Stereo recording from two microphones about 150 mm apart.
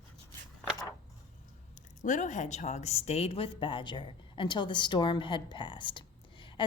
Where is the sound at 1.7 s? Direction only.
55° left (ahead or behind).